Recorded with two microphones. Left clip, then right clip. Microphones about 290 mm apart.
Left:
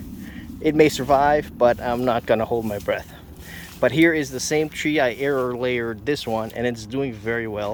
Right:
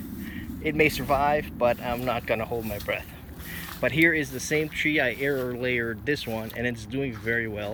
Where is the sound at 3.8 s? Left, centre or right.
Centre.